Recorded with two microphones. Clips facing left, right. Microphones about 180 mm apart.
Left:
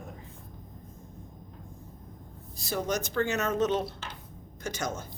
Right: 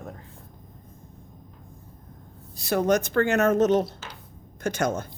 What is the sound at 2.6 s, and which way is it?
A woman's voice, 65° right (ahead or behind).